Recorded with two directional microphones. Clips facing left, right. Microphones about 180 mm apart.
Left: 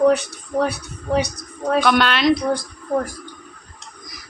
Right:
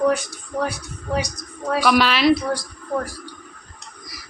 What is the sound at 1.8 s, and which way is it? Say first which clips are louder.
Speech: right 1 dB; centre (ahead or behind).